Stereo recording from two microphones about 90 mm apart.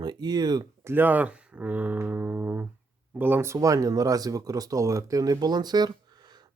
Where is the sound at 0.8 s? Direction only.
25° right (ahead or behind).